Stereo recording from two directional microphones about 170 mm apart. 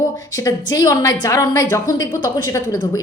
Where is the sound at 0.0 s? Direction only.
20° left (ahead or behind).